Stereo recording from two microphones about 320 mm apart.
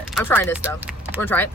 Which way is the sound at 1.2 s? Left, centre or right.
Centre.